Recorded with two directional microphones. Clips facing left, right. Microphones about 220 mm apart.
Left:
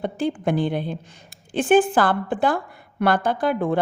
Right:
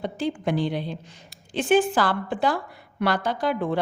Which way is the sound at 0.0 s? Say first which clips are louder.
Left 3 dB; 55° left (ahead or behind).